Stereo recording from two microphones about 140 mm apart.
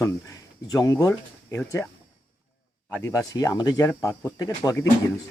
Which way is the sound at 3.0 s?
25° left (ahead or behind).